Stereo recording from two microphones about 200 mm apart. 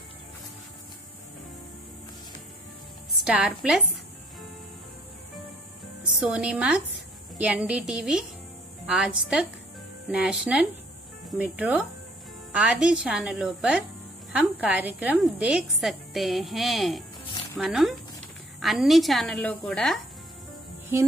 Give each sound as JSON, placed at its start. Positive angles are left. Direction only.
{"t": 3.3, "sound": "a woman's voice", "side_deg": -5}
{"t": 6.1, "sound": "a woman's voice", "side_deg": -5}